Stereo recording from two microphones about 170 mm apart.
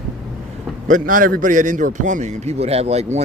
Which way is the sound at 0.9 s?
50° right (ahead or behind).